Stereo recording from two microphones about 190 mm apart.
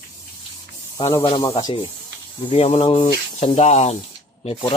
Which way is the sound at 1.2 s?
25° left (ahead or behind).